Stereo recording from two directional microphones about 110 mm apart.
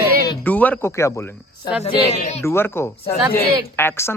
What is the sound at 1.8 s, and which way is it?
Speech, 75° left (ahead or behind).